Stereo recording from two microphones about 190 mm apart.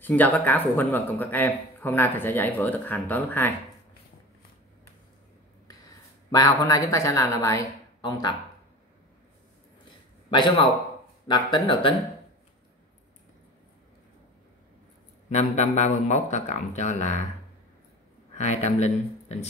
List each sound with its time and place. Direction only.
0.0 s a man's voice: 10° left (ahead or behind)
5.7 s speech: 20° left (ahead or behind)
10.3 s speech: 25° left (ahead or behind)
15.2 s speech: 35° left (ahead or behind)
18.3 s speech: 35° left (ahead or behind)